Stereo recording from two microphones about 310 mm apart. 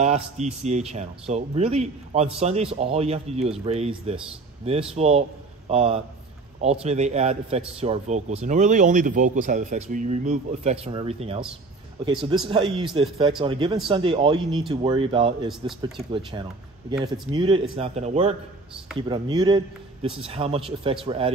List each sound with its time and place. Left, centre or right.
0.0 s a man's voice: right
12.4 s a man's voice: centre
17.0 s a man's voice: centre